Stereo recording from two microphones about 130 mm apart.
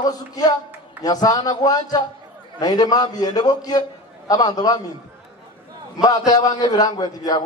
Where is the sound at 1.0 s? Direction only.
30° left (ahead or behind).